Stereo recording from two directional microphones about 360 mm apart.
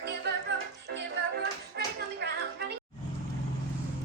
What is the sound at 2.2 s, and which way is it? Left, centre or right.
Music, right.